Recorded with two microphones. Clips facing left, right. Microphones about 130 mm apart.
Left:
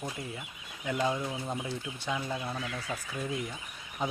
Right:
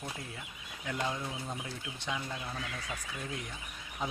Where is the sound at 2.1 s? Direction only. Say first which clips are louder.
Left 5 dB; 25° left (ahead or behind).